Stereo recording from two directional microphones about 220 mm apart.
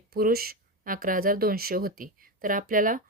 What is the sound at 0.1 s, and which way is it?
Speech, 40° right (ahead or behind).